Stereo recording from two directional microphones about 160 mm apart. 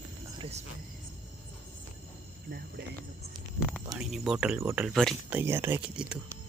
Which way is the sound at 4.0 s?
5° right (ahead or behind).